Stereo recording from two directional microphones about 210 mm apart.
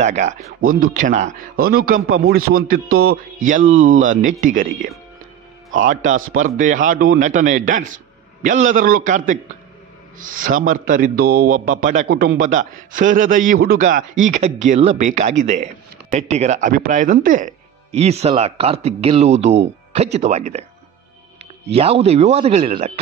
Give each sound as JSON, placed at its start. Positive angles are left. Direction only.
{"t": 0.0, "sound": "a man's voice", "side_deg": -35}
{"t": 21.6, "sound": "a man's voice", "side_deg": -30}